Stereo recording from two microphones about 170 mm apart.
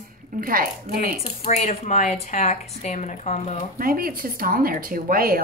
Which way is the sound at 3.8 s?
60° right (ahead or behind).